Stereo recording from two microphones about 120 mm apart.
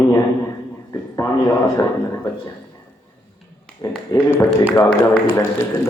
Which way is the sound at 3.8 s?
25° left (ahead or behind).